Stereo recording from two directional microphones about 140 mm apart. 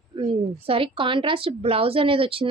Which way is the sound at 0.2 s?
35° right (ahead or behind).